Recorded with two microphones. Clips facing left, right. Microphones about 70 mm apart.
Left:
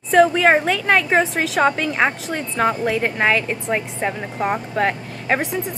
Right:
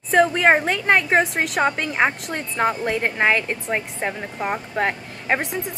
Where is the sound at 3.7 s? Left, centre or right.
Centre.